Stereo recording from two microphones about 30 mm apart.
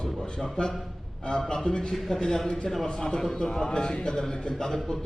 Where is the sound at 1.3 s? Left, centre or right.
Left.